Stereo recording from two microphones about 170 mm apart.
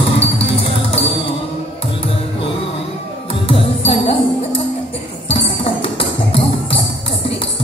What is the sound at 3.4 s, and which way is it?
Music, 35° left (ahead or behind).